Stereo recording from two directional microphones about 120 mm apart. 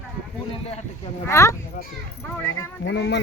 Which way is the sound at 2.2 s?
20° left (ahead or behind).